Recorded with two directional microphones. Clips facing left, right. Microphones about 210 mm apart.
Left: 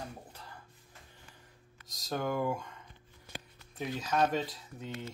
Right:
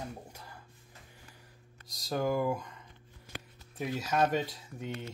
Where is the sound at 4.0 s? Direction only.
10° right (ahead or behind).